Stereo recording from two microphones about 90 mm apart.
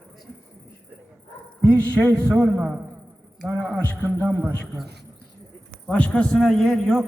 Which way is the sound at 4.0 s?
25° right (ahead or behind).